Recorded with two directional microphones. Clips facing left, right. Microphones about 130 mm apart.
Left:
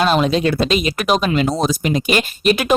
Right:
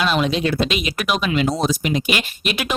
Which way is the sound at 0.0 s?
40° left (ahead or behind).